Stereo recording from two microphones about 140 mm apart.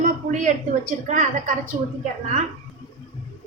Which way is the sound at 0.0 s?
65° right (ahead or behind).